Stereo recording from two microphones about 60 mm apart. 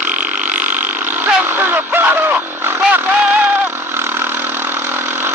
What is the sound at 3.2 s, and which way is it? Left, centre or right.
Vehicle, right.